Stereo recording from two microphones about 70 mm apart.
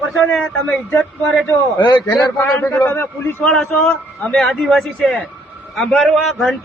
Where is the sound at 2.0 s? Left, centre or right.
Left.